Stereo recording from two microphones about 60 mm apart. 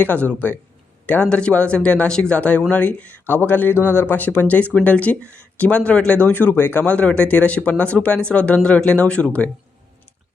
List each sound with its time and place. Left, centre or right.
0.0 s speech: left
1.3 s speech: centre